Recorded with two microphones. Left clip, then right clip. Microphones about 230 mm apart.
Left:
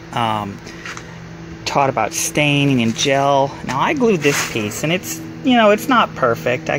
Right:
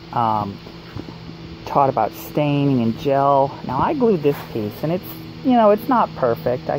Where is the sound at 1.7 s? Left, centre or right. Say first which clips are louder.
Left 1 dB; left.